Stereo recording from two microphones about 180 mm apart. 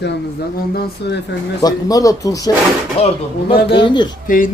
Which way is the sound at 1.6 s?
20° left (ahead or behind).